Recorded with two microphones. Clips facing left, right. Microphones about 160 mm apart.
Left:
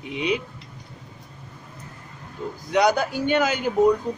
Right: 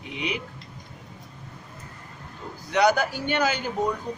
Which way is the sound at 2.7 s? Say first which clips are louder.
Left 1 dB; 20° left (ahead or behind).